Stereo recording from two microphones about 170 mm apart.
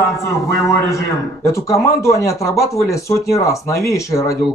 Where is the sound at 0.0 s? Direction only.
15° left (ahead or behind).